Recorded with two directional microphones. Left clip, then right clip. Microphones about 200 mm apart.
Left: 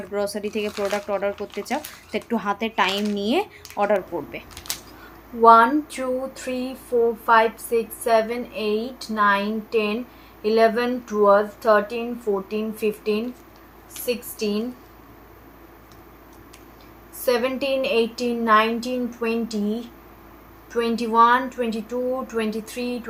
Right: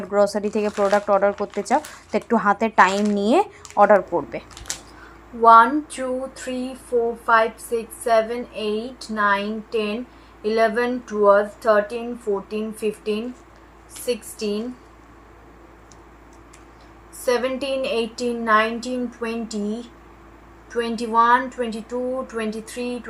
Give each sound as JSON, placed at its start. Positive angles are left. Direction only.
{"t": 0.2, "sound": "speech", "side_deg": -20}
{"t": 0.9, "sound": "speech", "side_deg": -10}
{"t": 2.5, "sound": "speech", "side_deg": -20}
{"t": 4.7, "sound": "a sound", "side_deg": 5}
{"t": 5.4, "sound": "speech", "side_deg": 5}
{"t": 17.2, "sound": "speech", "side_deg": 5}